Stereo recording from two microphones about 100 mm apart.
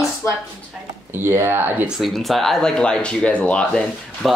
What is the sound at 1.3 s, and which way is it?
Speech, 25° right (ahead or behind).